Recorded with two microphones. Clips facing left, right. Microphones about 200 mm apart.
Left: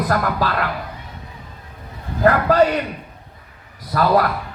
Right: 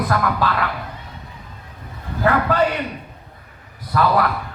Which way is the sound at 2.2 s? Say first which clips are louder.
Left 3 dB; 40° left (ahead or behind).